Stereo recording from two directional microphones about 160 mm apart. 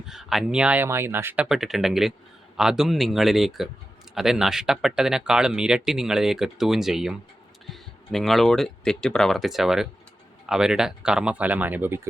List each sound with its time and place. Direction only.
0.0 s speech: centre (ahead or behind)